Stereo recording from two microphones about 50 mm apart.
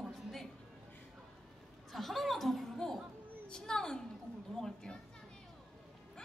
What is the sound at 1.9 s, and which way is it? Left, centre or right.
Chuckle, centre.